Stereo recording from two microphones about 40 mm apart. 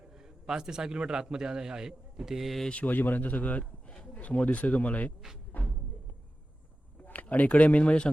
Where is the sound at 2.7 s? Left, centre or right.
Left.